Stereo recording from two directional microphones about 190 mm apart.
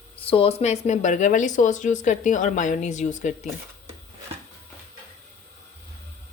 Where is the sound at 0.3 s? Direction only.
30° left (ahead or behind).